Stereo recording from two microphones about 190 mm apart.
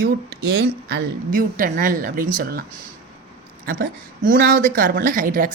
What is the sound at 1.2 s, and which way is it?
Speech, 45° right (ahead or behind).